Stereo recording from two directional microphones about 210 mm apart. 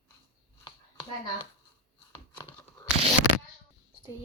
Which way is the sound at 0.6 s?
20° left (ahead or behind).